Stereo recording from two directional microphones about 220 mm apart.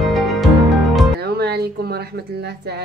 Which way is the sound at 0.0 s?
Centre (ahead or behind).